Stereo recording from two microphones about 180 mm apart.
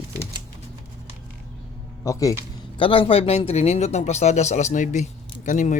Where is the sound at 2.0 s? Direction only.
20° left (ahead or behind).